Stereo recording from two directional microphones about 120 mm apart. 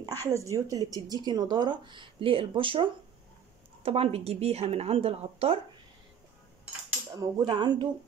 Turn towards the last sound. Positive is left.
turn(degrees=-35)  # may be behind; listen again after turning